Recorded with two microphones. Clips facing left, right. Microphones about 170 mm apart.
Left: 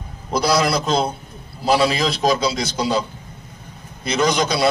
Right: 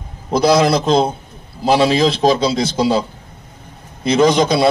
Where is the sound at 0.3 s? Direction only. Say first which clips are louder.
Right 6 dB; 25° right (ahead or behind).